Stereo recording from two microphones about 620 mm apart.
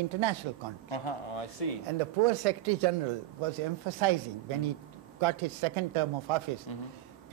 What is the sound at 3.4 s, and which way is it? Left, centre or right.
Speech, right.